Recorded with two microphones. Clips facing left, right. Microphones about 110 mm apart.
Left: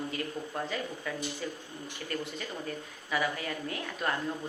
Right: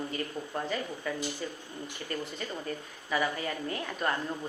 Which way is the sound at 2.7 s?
Centre (ahead or behind).